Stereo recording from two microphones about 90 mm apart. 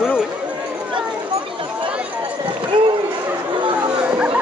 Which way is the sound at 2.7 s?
70° right (ahead or behind).